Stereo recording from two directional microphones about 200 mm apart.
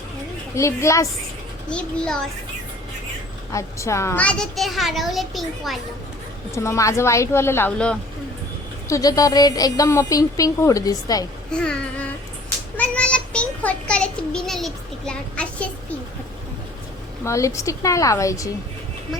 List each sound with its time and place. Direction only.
0.5 s a woman's voice: 15° left (ahead or behind)
1.7 s a woman's voice: 5° left (ahead or behind)
3.5 s a woman's voice: 15° left (ahead or behind)
6.5 s a woman's voice: 15° left (ahead or behind)
11.5 s a woman's voice: 5° left (ahead or behind)
17.2 s a woman's voice: 15° left (ahead or behind)